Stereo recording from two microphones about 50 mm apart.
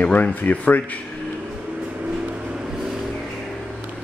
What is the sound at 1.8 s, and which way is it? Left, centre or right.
Vehicle, right.